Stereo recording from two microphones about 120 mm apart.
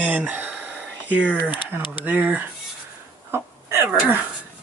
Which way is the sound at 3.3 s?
20° right (ahead or behind).